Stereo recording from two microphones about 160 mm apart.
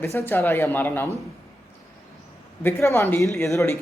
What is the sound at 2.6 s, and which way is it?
Speech, 15° left (ahead or behind).